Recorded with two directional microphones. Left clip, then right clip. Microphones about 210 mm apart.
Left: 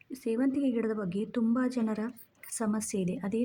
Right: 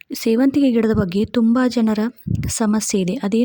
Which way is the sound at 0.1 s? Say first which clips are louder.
Right 13 dB; 40° right (ahead or behind).